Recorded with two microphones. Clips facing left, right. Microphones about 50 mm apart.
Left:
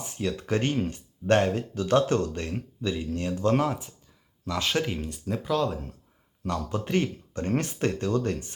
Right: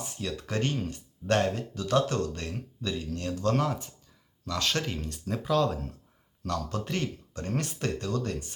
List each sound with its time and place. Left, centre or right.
0.0 s speech: left; by 6.0 s centre
6.4 s speech: left